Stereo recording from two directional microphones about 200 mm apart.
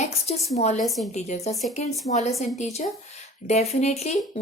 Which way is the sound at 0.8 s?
Centre (ahead or behind).